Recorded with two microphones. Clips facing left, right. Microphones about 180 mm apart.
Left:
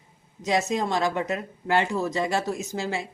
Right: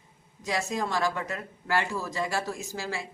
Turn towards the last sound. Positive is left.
turn(degrees=20)  # may be behind; listen again after turning